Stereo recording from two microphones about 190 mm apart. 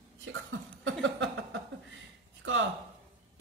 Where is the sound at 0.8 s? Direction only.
70° right (ahead or behind).